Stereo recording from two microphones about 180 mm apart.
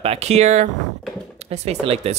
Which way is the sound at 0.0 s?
35° right (ahead or behind).